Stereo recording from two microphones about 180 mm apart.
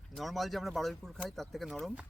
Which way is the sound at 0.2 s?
Centre (ahead or behind).